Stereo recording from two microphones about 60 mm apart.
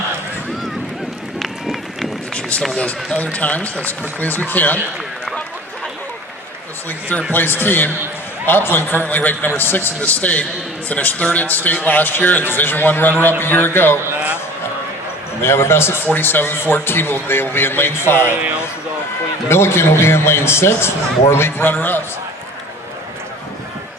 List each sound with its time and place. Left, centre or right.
1.4 s run: centre
2.3 s run: centre
3.3 s a man's voice: left
7.3 s a man's voice: left
15.4 s a man's voice: left
16.1 s a man's voice: left
19.5 s a man's voice: left